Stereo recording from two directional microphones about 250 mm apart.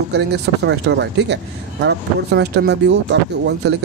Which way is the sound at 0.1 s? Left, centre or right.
Right.